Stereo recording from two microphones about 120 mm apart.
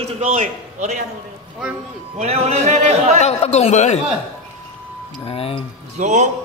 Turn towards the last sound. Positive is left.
turn(degrees=-90)